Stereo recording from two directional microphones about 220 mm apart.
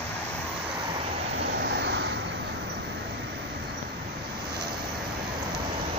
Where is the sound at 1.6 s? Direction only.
50° right (ahead or behind).